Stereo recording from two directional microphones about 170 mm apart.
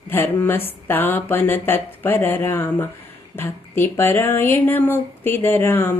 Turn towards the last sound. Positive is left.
turn(degrees=15)  # may be behind; listen again after turning